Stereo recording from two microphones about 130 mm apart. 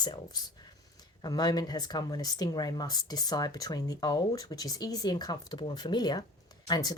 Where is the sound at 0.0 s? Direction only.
30° left (ahead or behind).